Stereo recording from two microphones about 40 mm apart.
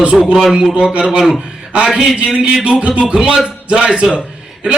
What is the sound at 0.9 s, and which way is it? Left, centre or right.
Speech, right.